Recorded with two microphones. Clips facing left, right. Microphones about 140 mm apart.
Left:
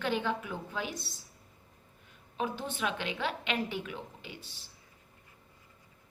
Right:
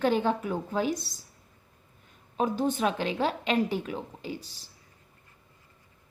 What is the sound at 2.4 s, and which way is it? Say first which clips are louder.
A woman's voice: right 8 dB; 40° right (ahead or behind).